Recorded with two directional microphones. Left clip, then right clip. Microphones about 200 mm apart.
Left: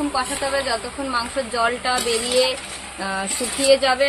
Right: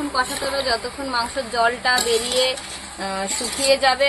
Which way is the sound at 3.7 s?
20° left (ahead or behind).